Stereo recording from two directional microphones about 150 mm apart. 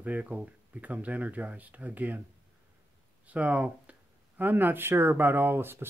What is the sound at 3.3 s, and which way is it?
Speech, 10° right (ahead or behind).